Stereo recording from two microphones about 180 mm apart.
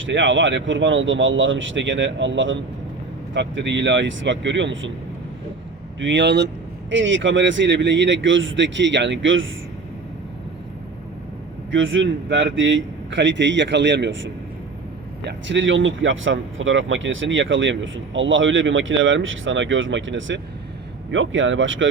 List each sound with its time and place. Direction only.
0.0 s speech: 90° right
6.0 s speech: 90° right; by 6.5 s 70° right (ahead or behind)
6.9 s speech: 90° right
11.7 s speech: 90° right